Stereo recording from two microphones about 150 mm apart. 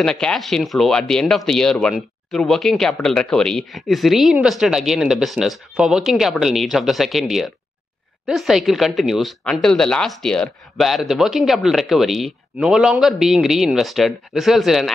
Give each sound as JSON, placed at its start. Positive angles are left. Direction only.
{"t": 0.0, "sound": "speech", "side_deg": 5}